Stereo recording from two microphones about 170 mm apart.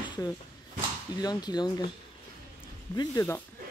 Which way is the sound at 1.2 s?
25° left (ahead or behind).